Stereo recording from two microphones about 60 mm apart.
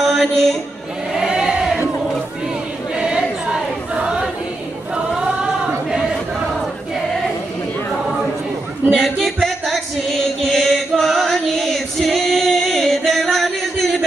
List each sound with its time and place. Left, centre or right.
0.0 s a man's voice: centre
1.1 s choir: centre
3.9 s choir: centre
8.9 s music: centre
10.4 s choir: centre